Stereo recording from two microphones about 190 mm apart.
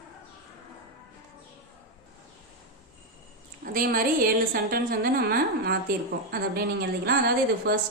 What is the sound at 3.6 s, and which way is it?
A woman's voice, 50° right (ahead or behind).